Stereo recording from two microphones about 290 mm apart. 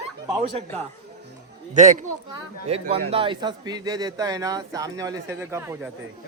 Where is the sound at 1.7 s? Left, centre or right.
Right; by 5.7 s centre.